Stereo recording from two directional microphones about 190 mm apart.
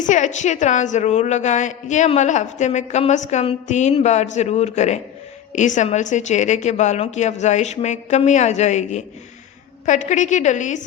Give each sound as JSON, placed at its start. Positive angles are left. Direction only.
{"t": 0.0, "sound": "a woman's voice", "side_deg": 40}